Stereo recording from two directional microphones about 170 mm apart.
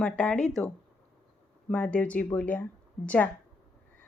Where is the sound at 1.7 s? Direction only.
5° left (ahead or behind).